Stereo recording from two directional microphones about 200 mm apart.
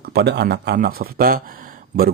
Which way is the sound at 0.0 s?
55° right (ahead or behind).